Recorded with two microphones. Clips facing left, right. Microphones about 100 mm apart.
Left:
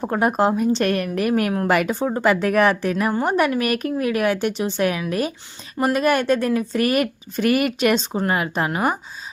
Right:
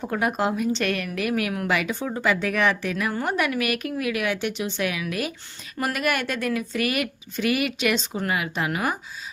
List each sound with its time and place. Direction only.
0.0 s speech: 40° left (ahead or behind)